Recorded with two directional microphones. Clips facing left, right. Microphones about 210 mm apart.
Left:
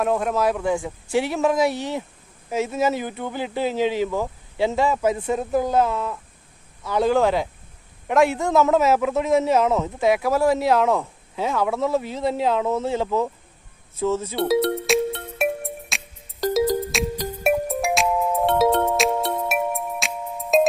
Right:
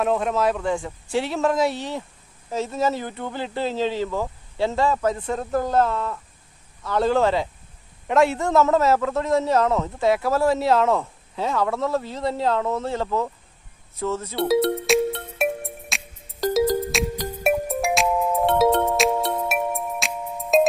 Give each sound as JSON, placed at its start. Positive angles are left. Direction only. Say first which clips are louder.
{"t": 0.0, "sound": "speech", "louder": "even", "side_deg": 0}
{"t": 2.6, "sound": "speech", "louder": "left 2 dB", "side_deg": 5}
{"t": 9.1, "sound": "speech", "louder": "left 2 dB", "side_deg": 20}
{"t": 14.3, "sound": "music", "louder": "right 4 dB", "side_deg": 0}